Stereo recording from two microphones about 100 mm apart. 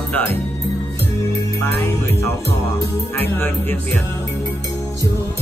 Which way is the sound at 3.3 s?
20° left (ahead or behind).